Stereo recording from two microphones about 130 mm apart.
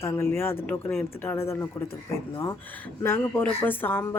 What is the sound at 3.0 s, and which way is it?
Speech, 15° left (ahead or behind).